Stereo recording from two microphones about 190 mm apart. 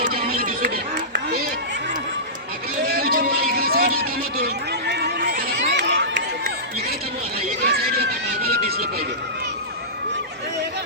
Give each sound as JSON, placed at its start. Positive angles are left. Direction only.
{"t": 0.0, "sound": "chatter", "side_deg": -50}
{"t": 2.8, "sound": "run", "side_deg": -50}
{"t": 7.6, "sound": "a sound", "side_deg": -55}